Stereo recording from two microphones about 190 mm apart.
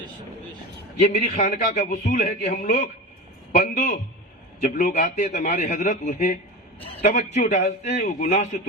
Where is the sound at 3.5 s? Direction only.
55° left (ahead or behind).